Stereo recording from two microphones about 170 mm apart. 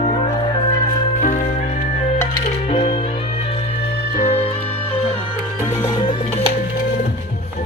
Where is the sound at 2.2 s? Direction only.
40° left (ahead or behind).